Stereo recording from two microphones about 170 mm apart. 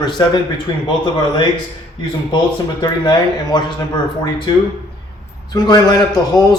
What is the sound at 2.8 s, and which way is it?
Speech, 25° left (ahead or behind).